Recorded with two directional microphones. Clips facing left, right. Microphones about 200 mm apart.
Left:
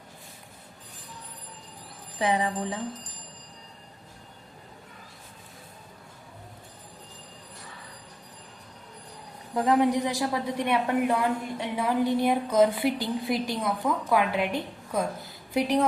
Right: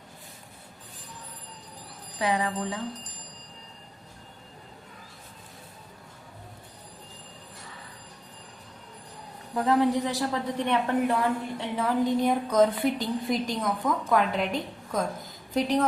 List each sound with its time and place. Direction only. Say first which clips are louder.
2.1 s speech: left 1 dB; 20° left (ahead or behind)
9.6 s a woman's voice: left 1 dB; 15° left (ahead or behind)